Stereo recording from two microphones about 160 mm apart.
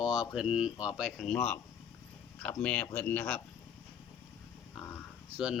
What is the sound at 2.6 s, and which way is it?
Speech, 10° left (ahead or behind).